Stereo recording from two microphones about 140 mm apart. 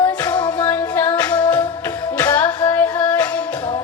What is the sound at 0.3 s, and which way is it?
Music, 30° left (ahead or behind).